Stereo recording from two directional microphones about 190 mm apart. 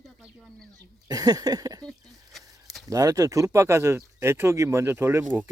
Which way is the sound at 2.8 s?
15° right (ahead or behind).